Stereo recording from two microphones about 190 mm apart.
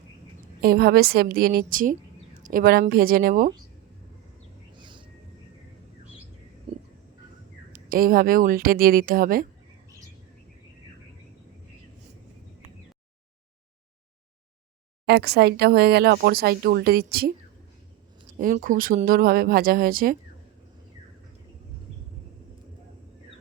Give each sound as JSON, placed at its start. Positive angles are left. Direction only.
{"t": 0.6, "sound": "a woman's voice", "side_deg": -55}
{"t": 4.8, "sound": "a sound", "side_deg": -25}
{"t": 6.7, "sound": "a sound", "side_deg": -30}
{"t": 7.7, "sound": "speech", "side_deg": -50}
{"t": 15.0, "sound": "speech", "side_deg": -60}
{"t": 18.3, "sound": "speech", "side_deg": -45}